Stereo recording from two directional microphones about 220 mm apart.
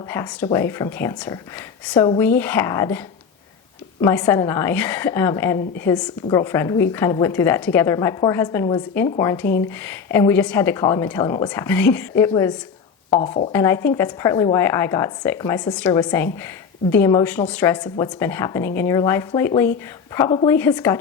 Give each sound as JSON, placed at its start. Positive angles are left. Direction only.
{"t": 0.1, "sound": "a woman's voice", "side_deg": 10}
{"t": 4.0, "sound": "a woman's voice", "side_deg": 10}
{"t": 13.5, "sound": "a woman's voice", "side_deg": 10}